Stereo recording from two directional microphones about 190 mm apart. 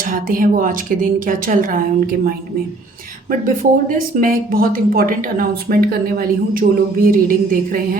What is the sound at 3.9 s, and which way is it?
A woman's voice, 50° right (ahead or behind).